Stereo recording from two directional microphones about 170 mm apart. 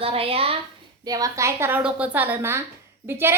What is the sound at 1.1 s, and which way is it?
A woman's voice, 20° right (ahead or behind).